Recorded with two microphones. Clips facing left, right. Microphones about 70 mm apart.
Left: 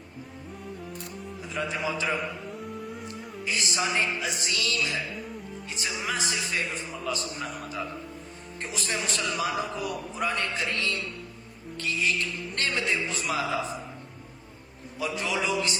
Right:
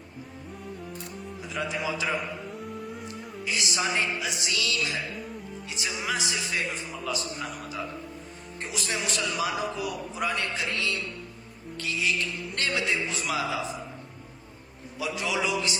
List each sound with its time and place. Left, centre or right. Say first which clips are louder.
1.5 s a man's voice: even; left
2.5 s music: even; centre
3.4 s a woman's voice: even; left
10.8 s music: even; left
13.1 s a man's voice: even; left
14.9 s a man's voice: even; left